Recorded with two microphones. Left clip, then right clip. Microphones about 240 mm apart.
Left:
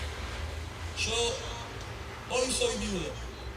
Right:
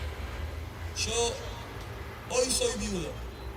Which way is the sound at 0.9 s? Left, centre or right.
Centre.